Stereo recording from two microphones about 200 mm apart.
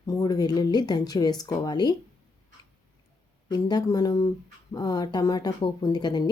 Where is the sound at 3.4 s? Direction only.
20° left (ahead or behind).